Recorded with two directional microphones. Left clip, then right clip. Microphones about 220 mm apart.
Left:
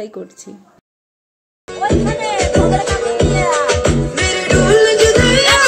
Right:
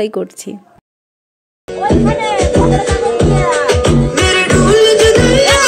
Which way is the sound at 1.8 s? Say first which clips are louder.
Right 3 dB; 45° left (ahead or behind).